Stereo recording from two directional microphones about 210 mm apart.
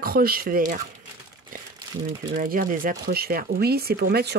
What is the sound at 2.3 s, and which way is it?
Speech, 40° right (ahead or behind).